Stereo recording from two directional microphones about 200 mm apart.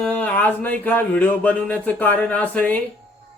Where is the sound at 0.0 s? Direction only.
5° left (ahead or behind).